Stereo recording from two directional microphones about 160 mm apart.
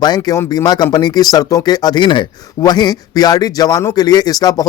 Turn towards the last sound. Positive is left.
turn(degrees=25)  # may be behind; listen again after turning